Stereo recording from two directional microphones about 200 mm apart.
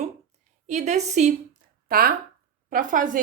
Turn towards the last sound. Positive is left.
turn(degrees=-40)  # may be behind; listen again after turning